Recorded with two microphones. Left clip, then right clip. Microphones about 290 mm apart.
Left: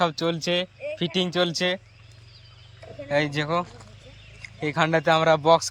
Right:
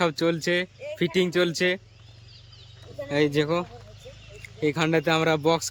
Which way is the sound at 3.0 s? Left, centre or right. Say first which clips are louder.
Right 1 dB; centre.